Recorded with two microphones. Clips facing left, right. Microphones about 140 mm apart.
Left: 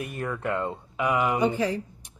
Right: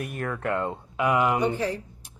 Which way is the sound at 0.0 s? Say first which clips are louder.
Even; centre (ahead or behind).